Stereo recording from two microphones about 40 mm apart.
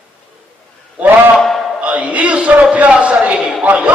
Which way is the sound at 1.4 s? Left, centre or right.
Centre.